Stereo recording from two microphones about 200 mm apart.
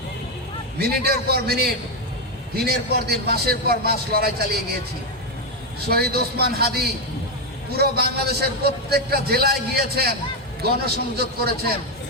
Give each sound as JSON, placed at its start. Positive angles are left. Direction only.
{"t": 0.8, "sound": "a man's voice", "side_deg": -50}
{"t": 5.9, "sound": "a man's voice", "side_deg": -50}
{"t": 11.2, "sound": "a man's voice", "side_deg": -50}